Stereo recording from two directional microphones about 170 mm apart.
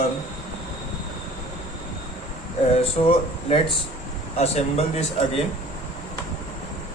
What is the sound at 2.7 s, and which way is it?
Speech, 35° left (ahead or behind).